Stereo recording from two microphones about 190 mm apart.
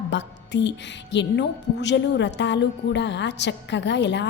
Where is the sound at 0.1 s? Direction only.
70° left (ahead or behind).